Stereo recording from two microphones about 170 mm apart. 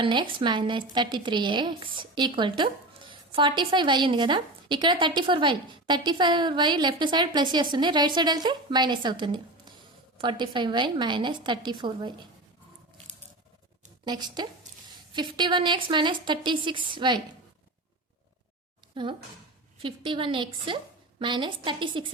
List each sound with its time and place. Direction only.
0.0 s a woman's voice: 30° right (ahead or behind)
14.0 s a woman's voice: 25° right (ahead or behind)
19.8 s a woman's voice: 30° right (ahead or behind)